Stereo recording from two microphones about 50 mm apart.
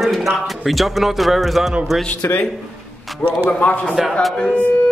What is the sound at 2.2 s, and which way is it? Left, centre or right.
Speech, left.